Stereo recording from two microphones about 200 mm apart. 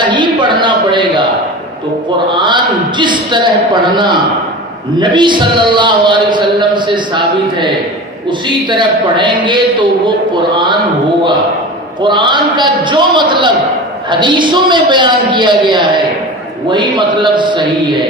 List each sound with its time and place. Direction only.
0.0 s a sound: 25° right (ahead or behind)
3.9 s a man's voice: 20° right (ahead or behind)
12.0 s a man's voice: 25° right (ahead or behind)